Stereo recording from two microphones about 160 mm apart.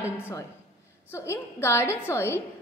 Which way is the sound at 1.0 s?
15° left (ahead or behind).